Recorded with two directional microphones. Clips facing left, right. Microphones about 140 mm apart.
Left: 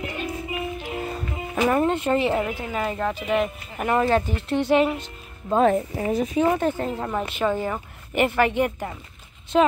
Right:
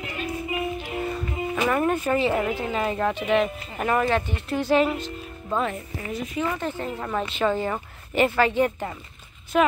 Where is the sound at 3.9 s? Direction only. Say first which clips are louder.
Left 3 dB; 30° left (ahead or behind).